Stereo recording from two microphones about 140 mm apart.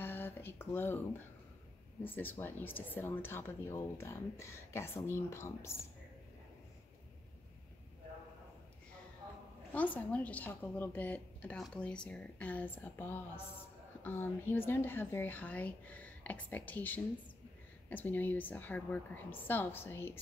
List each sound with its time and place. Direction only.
0.0 s a sound: 15° left (ahead or behind)
2.0 s speech: 15° left (ahead or behind)
9.7 s speech: 10° left (ahead or behind)